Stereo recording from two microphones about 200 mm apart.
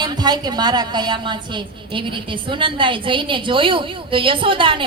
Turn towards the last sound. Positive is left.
turn(degrees=-25)  # may be behind; listen again after turning